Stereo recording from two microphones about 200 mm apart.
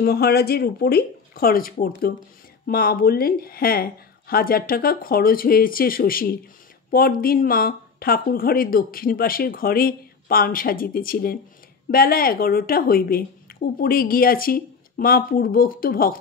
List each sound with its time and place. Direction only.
0.0 s speech: 50° left (ahead or behind)